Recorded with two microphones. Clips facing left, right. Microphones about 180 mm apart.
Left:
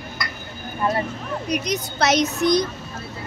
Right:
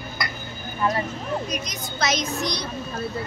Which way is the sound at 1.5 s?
65° left (ahead or behind).